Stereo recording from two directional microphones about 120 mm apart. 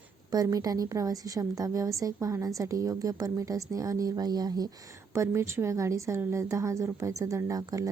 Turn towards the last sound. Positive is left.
turn(degrees=-30)  # may be behind; listen again after turning